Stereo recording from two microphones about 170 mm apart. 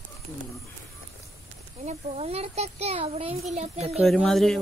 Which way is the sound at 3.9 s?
Centre (ahead or behind).